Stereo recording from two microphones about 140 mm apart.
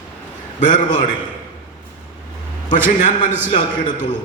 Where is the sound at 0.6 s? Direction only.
65° left (ahead or behind).